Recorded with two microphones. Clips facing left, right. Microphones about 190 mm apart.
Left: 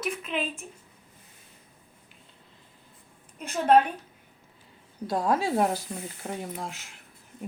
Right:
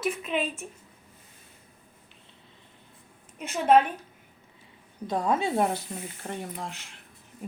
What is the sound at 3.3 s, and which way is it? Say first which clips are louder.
Speech: even; 5° right (ahead or behind).